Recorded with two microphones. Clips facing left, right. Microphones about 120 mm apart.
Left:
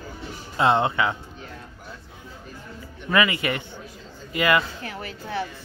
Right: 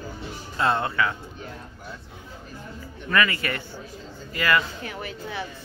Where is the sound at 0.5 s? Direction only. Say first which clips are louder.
Left 4 dB; 20° left (ahead or behind).